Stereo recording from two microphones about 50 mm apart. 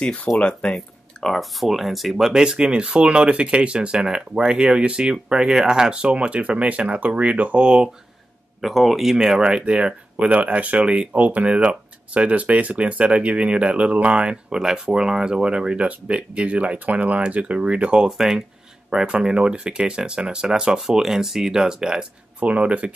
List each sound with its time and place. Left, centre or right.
0.0 s speech: left
0.7 s speech: centre
8.5 s speech: centre; by 18.0 s right
18.0 s speech: centre
22.4 s speech: right